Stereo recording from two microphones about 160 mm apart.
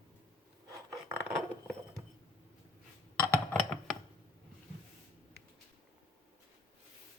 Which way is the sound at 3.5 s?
5° left (ahead or behind).